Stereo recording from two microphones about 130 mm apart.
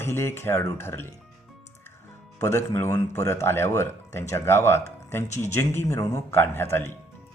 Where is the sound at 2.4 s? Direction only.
20° left (ahead or behind).